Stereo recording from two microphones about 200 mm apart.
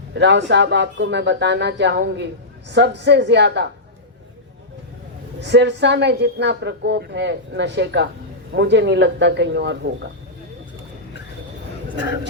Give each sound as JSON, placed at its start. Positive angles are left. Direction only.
{"t": 0.1, "sound": "a woman's voice", "side_deg": -60}
{"t": 5.4, "sound": "a woman's voice", "side_deg": -60}